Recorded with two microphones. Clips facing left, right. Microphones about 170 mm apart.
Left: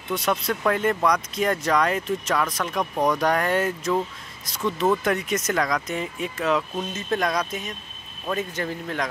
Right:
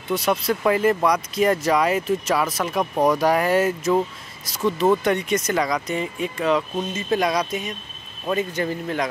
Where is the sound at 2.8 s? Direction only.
20° right (ahead or behind).